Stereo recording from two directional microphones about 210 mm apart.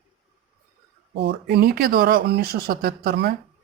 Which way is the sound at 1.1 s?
55° right (ahead or behind).